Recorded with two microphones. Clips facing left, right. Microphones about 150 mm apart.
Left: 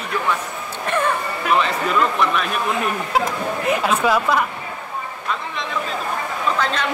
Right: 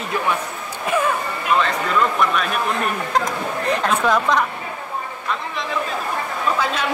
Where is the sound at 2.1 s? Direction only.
Centre (ahead or behind).